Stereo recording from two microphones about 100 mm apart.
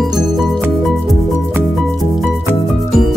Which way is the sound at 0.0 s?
Centre (ahead or behind).